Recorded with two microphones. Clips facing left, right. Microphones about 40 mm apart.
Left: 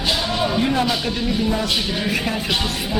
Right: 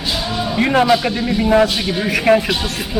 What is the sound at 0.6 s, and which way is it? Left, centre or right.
Speech, right.